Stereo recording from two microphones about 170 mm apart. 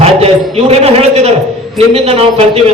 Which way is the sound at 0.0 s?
40° right (ahead or behind).